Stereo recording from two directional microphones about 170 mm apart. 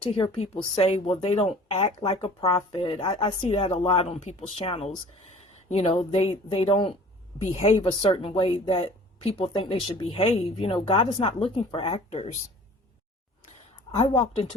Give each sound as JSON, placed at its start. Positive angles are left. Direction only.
{"t": 0.0, "sound": "a woman's voice", "side_deg": 35}